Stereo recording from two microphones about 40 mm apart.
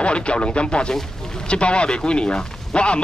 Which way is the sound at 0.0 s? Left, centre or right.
Left.